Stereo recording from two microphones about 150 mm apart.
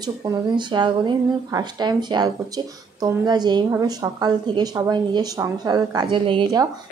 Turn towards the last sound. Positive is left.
turn(degrees=-35)  # may be behind; listen again after turning